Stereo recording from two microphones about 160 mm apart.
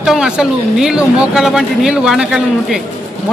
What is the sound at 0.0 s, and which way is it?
A man's voice, 5° right (ahead or behind).